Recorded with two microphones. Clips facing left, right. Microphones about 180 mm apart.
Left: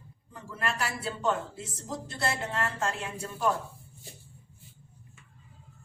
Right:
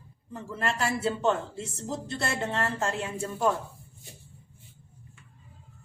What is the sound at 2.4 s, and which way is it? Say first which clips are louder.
Speech: right 2 dB; 25° right (ahead or behind).